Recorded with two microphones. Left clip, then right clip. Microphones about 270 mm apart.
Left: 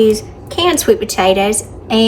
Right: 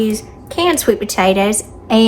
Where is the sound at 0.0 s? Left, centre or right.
Centre.